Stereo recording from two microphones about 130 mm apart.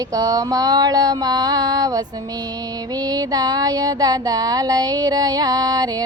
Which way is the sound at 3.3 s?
30° right (ahead or behind).